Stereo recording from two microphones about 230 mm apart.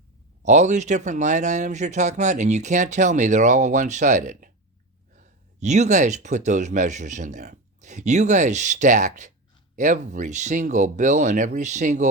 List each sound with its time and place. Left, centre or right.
0.4 s speech: right